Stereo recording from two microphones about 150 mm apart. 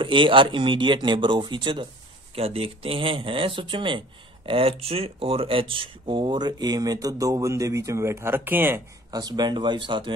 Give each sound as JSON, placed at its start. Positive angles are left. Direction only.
{"t": 0.0, "sound": "speech", "side_deg": -35}
{"t": 9.1, "sound": "speech", "side_deg": -25}